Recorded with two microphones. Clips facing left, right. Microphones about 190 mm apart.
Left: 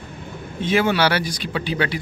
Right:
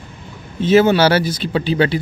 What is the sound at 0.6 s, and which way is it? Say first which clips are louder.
Speech: right 7 dB; 30° right (ahead or behind).